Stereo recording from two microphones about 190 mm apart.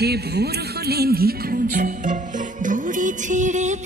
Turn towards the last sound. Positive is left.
turn(degrees=-40)  # may be behind; listen again after turning